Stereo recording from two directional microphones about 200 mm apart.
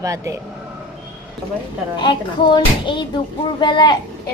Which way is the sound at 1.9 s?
25° left (ahead or behind).